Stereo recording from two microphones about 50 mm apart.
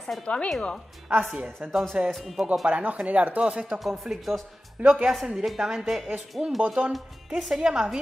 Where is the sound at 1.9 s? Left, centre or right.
Centre.